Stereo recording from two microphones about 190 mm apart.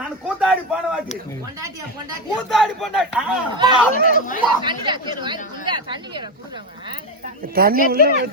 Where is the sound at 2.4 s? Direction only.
Centre (ahead or behind).